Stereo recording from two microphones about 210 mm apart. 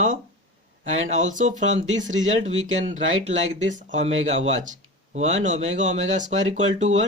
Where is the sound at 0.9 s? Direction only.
70° right (ahead or behind).